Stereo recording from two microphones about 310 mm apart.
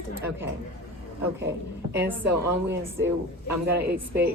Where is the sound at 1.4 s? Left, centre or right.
Centre.